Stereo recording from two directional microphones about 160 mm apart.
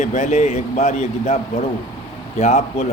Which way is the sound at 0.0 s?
45° left (ahead or behind).